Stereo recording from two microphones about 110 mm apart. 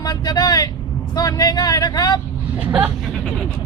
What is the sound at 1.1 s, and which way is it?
Speech, 35° left (ahead or behind).